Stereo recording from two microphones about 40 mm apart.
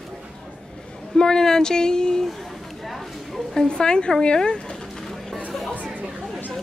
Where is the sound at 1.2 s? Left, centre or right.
Centre.